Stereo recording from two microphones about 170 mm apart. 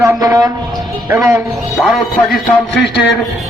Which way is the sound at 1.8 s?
Centre (ahead or behind).